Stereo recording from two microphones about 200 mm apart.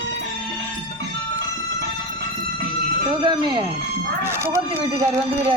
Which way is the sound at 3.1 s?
25° right (ahead or behind).